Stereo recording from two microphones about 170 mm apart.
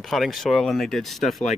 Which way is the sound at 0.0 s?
Centre (ahead or behind).